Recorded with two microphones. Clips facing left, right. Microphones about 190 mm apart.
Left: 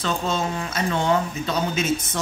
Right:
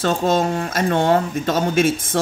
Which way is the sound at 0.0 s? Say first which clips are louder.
Right 7 dB; 45° right (ahead or behind).